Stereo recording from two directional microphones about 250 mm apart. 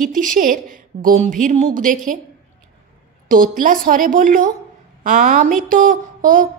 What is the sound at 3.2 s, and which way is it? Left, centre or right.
A woman's voice, right.